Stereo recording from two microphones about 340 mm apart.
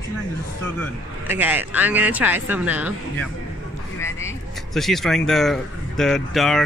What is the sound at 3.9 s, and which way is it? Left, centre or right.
Speech, centre.